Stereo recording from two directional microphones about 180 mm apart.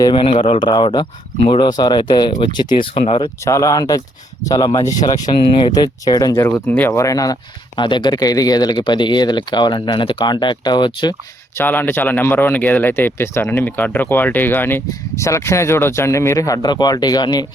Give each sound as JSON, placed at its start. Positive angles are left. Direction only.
{"t": 0.0, "sound": "speech", "side_deg": 25}
{"t": 3.4, "sound": "speech", "side_deg": 15}
{"t": 11.5, "sound": "speech", "side_deg": 10}